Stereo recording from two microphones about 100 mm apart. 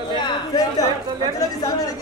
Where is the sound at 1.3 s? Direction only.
35° left (ahead or behind).